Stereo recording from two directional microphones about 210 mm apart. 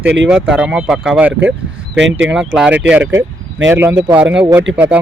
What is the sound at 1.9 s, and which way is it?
Speech, 60° right (ahead or behind).